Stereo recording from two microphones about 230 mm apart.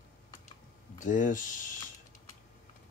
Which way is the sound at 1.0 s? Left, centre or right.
Left.